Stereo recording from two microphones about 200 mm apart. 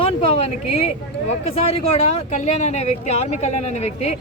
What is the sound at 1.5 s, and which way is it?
Speech, 30° left (ahead or behind).